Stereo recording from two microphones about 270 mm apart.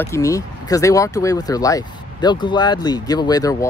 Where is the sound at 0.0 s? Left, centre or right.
Centre.